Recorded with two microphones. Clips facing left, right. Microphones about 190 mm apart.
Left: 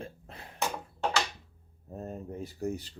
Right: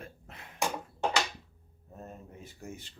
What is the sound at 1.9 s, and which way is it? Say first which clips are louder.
Speech: left 8 dB; 35° left (ahead or behind).